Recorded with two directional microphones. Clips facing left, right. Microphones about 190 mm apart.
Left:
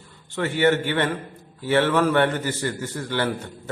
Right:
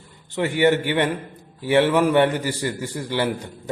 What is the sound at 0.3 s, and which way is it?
A man's voice, 15° right (ahead or behind).